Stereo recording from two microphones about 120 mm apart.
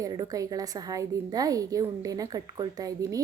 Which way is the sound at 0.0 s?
30° right (ahead or behind).